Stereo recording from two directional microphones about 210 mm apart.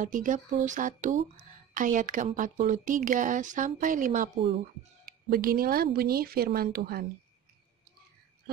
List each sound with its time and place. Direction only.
0.0 s speech: 40° right (ahead or behind)
5.3 s speech: 45° right (ahead or behind)